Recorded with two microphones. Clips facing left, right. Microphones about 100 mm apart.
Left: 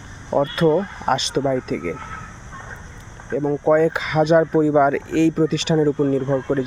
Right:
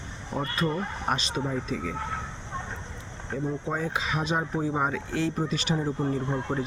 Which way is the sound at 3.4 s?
65° left (ahead or behind).